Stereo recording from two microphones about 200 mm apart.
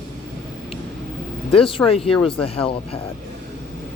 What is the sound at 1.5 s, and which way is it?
Speech, 30° left (ahead or behind).